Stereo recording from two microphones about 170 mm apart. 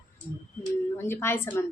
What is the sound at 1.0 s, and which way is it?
Speech, 15° left (ahead or behind).